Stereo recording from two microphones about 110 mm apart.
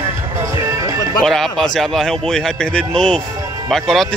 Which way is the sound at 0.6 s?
30° right (ahead or behind).